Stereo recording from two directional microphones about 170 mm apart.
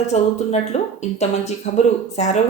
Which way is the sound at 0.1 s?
40° left (ahead or behind).